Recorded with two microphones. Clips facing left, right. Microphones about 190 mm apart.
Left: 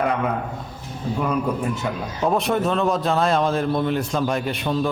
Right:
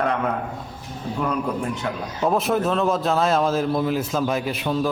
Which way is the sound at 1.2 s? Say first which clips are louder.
Left 1 dB; 5° left (ahead or behind).